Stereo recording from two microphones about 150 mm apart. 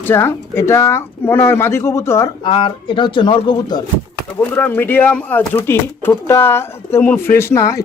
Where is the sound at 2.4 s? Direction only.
35° left (ahead or behind).